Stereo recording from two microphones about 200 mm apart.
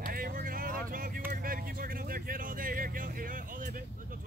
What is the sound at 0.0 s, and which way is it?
Vehicle, 45° right (ahead or behind).